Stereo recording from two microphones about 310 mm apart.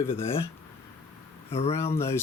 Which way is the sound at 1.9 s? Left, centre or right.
Centre.